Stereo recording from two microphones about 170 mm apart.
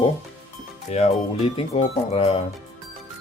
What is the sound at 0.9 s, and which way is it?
Speech, 40° left (ahead or behind).